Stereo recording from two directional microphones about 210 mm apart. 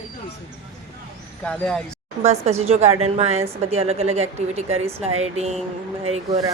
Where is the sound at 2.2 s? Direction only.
30° right (ahead or behind).